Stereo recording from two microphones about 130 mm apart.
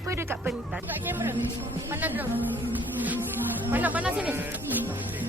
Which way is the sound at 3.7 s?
15° right (ahead or behind).